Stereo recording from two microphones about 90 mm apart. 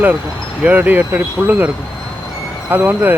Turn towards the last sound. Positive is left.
turn(degrees=-20)  # may be behind; listen again after turning